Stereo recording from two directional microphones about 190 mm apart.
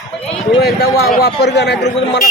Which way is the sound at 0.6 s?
60° left (ahead or behind).